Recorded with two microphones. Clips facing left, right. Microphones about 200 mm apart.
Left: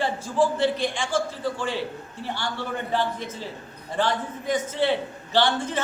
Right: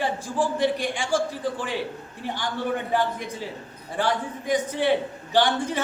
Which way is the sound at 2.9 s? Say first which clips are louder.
Right 1 dB; 15° right (ahead or behind).